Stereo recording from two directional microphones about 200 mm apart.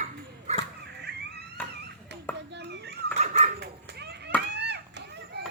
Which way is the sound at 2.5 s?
60° right (ahead or behind).